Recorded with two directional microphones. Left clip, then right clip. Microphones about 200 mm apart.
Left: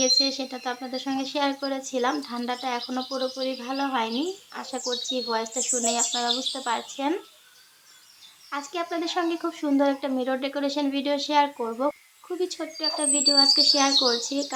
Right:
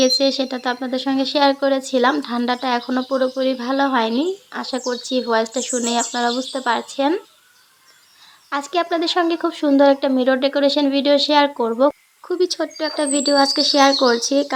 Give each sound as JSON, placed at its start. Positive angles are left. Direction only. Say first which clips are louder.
{"t": 0.0, "sound": "speech", "louder": "right 6 dB", "side_deg": -35}
{"t": 8.4, "sound": "speech", "louder": "right 10 dB", "side_deg": -35}